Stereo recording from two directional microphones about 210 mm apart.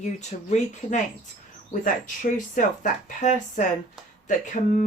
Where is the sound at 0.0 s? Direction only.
35° left (ahead or behind).